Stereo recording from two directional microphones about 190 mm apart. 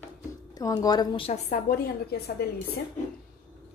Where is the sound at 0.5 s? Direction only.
20° left (ahead or behind).